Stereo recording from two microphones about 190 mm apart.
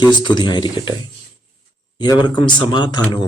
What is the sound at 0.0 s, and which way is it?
Speech, 25° left (ahead or behind).